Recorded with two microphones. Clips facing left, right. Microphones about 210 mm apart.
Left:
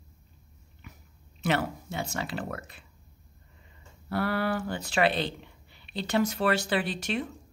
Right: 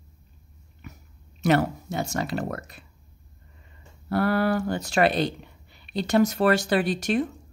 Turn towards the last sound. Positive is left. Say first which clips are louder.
# right 7 dB
turn(degrees=-45)  # may be behind; listen again after turning